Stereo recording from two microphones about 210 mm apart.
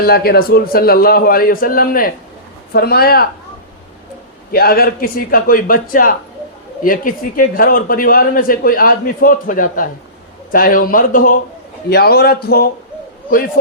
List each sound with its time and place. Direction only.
0.0 s a man's voice: 45° left (ahead or behind)
4.5 s a man's voice: 45° left (ahead or behind)